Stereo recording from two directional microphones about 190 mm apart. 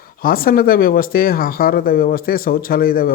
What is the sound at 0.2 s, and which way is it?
Speech, 50° left (ahead or behind).